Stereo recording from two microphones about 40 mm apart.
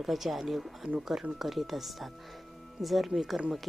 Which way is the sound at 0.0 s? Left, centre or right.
Centre.